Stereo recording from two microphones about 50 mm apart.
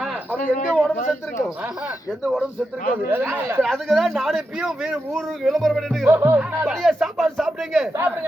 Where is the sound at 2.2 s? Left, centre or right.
Centre.